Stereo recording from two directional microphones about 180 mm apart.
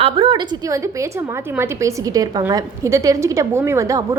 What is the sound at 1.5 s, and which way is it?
A woman's voice, 15° right (ahead or behind).